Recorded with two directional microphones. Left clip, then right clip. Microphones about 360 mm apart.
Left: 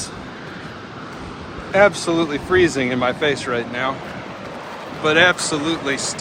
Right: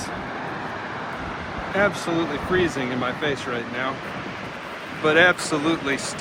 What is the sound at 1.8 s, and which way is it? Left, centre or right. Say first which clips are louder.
Speech: left 7 dB; centre.